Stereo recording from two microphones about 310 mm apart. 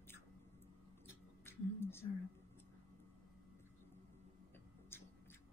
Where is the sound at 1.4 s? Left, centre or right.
Centre.